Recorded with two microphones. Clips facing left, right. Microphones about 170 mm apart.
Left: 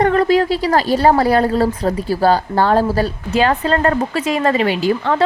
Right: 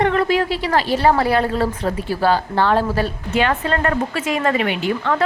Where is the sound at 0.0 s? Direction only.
40° left (ahead or behind).